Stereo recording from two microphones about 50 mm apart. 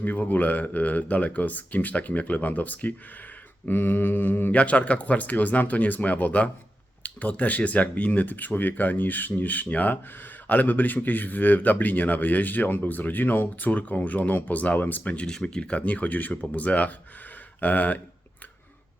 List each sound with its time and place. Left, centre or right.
0.0 s speech: left
3.7 s mantra: left
4.5 s speech: left
15.1 s speech: centre; by 18.0 s left